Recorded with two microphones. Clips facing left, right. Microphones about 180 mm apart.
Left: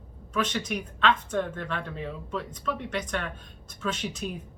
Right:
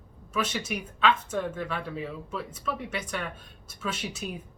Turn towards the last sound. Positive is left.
turn(degrees=-10)  # may be behind; listen again after turning